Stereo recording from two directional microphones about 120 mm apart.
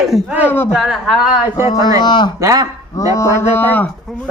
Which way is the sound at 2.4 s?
30° right (ahead or behind).